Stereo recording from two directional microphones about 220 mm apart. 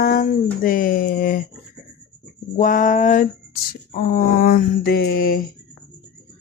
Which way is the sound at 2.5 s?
35° left (ahead or behind).